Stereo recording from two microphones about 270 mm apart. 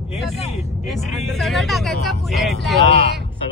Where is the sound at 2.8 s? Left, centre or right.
Right.